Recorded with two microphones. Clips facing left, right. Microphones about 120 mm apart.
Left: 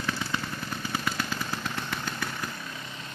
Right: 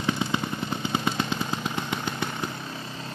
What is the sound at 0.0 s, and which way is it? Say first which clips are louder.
Vehicle: right 5 dB; 20° right (ahead or behind).